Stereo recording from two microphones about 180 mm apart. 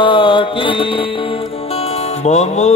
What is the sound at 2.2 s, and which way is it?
Music, 40° left (ahead or behind).